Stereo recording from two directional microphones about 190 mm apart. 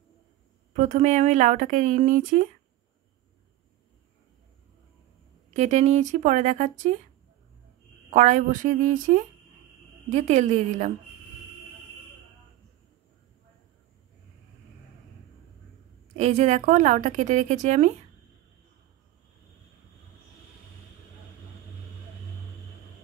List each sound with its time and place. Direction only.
0.7 s a woman's voice: 40° right (ahead or behind)
5.5 s a woman's voice: 40° right (ahead or behind)
8.1 s a woman's voice: 40° right (ahead or behind)
16.2 s a woman's voice: 35° right (ahead or behind)